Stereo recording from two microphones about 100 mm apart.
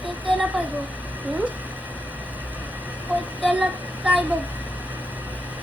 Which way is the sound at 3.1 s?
15° right (ahead or behind).